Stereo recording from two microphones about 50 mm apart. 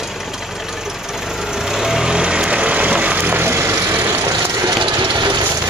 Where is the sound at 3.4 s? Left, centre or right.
Right.